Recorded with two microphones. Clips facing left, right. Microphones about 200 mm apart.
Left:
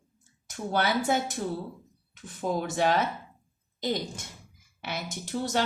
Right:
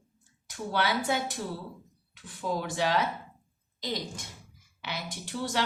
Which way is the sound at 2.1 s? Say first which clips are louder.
Left 3 dB; 45° left (ahead or behind).